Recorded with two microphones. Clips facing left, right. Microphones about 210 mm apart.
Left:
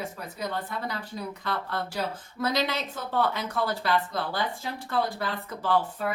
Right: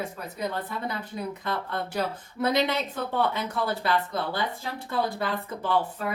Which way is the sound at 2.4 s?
25° right (ahead or behind).